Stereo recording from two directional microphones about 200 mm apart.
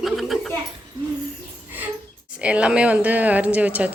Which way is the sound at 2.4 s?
5° right (ahead or behind).